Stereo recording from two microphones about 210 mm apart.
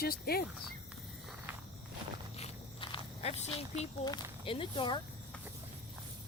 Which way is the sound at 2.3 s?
25° left (ahead or behind).